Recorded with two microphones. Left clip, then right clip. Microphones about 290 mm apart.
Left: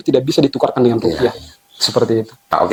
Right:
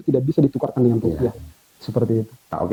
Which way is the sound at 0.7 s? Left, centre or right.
Centre.